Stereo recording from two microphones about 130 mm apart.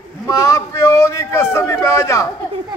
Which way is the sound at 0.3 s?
25° left (ahead or behind).